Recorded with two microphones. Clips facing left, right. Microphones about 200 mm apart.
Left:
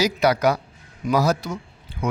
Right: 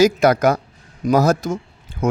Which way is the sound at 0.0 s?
50° right (ahead or behind).